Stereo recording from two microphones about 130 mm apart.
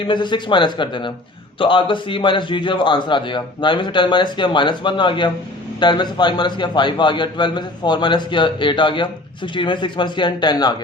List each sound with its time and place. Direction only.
0.0 s a man's voice: 35° left (ahead or behind)